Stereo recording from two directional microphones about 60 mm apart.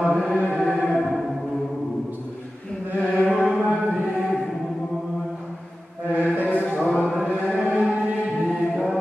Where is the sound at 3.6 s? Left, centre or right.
Centre.